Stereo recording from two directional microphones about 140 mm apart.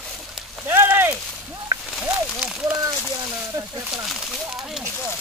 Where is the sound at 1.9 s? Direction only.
Centre (ahead or behind).